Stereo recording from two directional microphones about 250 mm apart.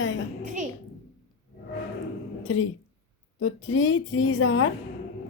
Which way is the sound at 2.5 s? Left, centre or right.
Left.